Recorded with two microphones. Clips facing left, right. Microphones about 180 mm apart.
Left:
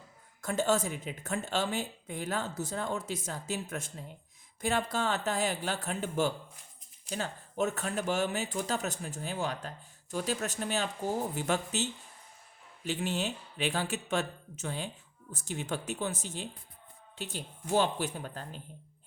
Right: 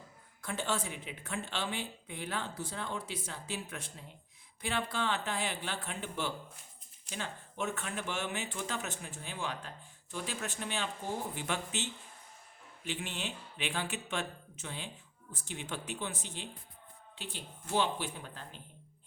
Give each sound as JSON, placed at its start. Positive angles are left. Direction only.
{"t": 0.4, "sound": "speech", "side_deg": 45}